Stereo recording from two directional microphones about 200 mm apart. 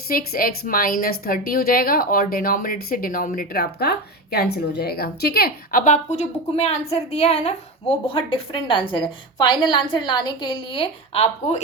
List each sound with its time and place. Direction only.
0.1 s a woman's voice: 45° left (ahead or behind)